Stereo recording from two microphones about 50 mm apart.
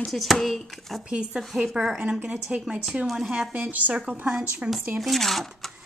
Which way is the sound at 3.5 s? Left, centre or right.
Right.